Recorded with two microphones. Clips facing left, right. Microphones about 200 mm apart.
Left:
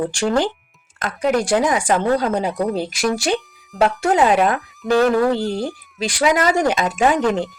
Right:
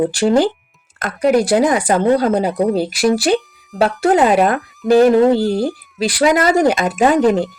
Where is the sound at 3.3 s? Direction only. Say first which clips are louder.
Right 5 dB; centre (ahead or behind).